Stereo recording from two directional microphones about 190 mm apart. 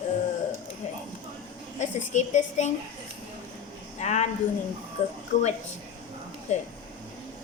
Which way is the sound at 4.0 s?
35° left (ahead or behind).